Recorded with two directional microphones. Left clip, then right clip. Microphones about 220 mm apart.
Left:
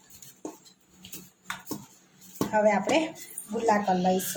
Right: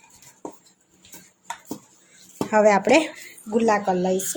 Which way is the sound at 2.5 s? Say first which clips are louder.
Right 7 dB; 50° right (ahead or behind).